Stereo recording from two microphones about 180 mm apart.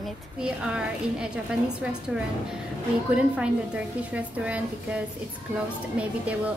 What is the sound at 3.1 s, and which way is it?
A woman's voice, 5° right (ahead or behind).